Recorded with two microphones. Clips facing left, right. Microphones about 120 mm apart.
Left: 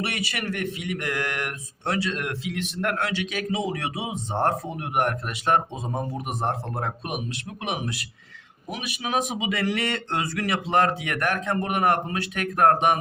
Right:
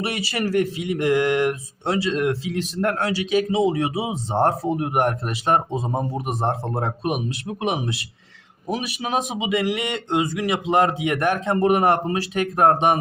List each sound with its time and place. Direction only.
0.0 s speech: 30° right (ahead or behind)